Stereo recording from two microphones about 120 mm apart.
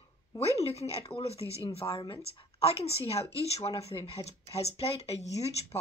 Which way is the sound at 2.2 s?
55° left (ahead or behind).